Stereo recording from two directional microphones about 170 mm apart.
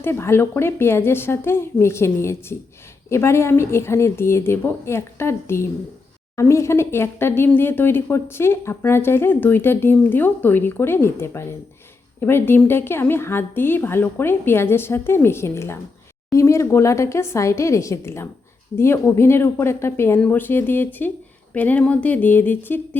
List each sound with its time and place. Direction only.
0.0 s speech: 15° left (ahead or behind)